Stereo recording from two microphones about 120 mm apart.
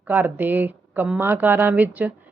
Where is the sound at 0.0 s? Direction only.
15° right (ahead or behind).